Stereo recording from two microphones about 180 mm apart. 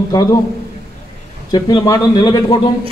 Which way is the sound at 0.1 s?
20° left (ahead or behind).